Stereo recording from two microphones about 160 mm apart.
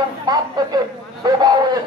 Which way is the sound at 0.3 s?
25° right (ahead or behind).